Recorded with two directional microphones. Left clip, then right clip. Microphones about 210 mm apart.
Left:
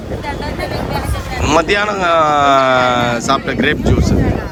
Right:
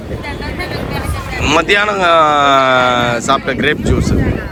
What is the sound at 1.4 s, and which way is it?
Speech, 5° left (ahead or behind).